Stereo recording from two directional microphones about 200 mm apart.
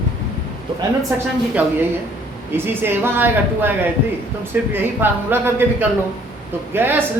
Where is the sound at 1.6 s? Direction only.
5° right (ahead or behind).